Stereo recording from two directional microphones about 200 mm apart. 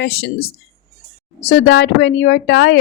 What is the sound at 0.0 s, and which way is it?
Speech, 50° left (ahead or behind).